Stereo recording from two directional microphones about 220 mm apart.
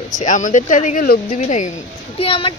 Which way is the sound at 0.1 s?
35° left (ahead or behind).